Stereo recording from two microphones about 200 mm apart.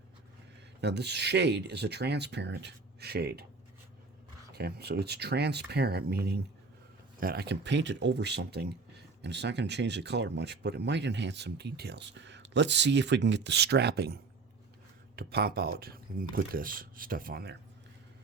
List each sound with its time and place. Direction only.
0.8 s speech: 55° right (ahead or behind)
4.5 s speech: 55° right (ahead or behind)
7.2 s speech: 50° right (ahead or behind)